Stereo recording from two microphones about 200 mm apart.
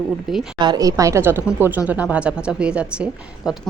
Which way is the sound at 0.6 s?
20° right (ahead or behind).